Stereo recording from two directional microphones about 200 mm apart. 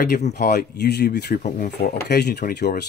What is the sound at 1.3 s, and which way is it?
Speech, 40° left (ahead or behind).